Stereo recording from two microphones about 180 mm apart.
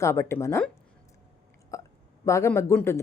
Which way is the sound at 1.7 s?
15° left (ahead or behind).